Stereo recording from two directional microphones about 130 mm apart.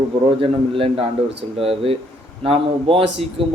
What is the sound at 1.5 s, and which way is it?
A man's voice, 45° right (ahead or behind).